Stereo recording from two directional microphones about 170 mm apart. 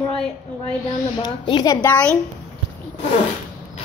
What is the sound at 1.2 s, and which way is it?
Speech, 25° left (ahead or behind).